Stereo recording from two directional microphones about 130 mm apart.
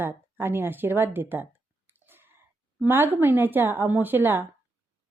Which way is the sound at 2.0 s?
15° right (ahead or behind).